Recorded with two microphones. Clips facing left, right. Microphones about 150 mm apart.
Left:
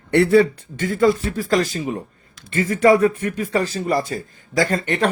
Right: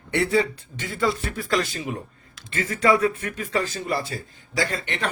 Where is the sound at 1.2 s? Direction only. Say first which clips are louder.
Left 5 dB; 35° left (ahead or behind).